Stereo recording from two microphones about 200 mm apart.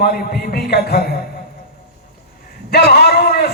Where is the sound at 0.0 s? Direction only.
50° left (ahead or behind).